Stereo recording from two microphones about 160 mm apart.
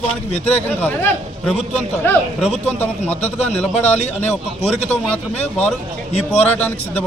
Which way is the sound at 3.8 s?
45° left (ahead or behind).